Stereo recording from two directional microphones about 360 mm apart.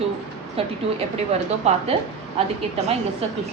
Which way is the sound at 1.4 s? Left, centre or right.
Centre.